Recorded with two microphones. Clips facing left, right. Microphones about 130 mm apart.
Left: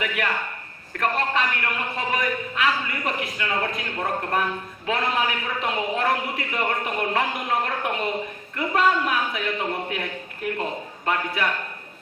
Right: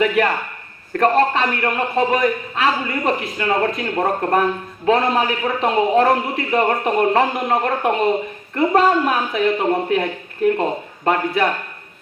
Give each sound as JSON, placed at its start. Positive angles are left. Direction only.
{"t": 0.0, "sound": "a man's voice", "side_deg": -35}